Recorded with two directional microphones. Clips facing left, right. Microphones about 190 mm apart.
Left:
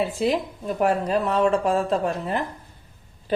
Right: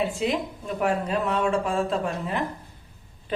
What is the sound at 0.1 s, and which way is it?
A woman's voice, 40° left (ahead or behind).